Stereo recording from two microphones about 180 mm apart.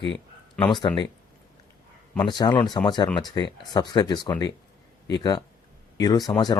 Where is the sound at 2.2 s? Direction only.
25° left (ahead or behind).